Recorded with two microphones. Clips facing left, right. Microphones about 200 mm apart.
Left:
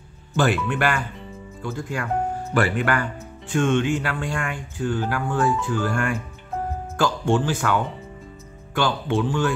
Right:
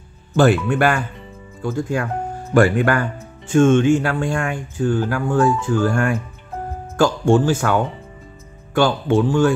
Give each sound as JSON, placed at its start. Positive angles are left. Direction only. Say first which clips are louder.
{"t": 0.4, "sound": "speech", "louder": "right 6 dB", "side_deg": -45}